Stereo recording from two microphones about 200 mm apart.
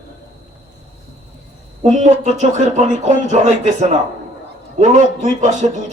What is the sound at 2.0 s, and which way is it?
Speech, 35° right (ahead or behind).